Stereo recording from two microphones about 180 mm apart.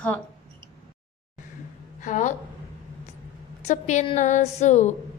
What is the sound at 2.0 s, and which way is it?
Speech, 45° left (ahead or behind).